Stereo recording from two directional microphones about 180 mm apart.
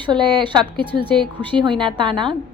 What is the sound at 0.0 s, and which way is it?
Speech, 25° right (ahead or behind).